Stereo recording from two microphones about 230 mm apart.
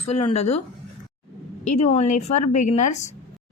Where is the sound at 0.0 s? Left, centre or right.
Left.